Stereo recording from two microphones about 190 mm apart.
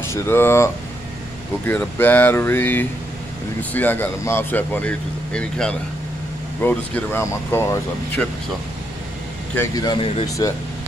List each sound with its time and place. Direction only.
0.1 s speech: 10° left (ahead or behind)
1.7 s speech: 10° left (ahead or behind)
9.6 s speech: 20° left (ahead or behind)